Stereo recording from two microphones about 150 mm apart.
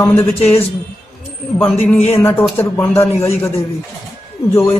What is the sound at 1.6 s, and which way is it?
Speech, 5° left (ahead or behind).